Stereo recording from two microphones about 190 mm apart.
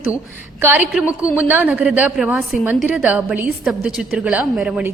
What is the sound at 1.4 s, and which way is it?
A woman's voice, 10° right (ahead or behind).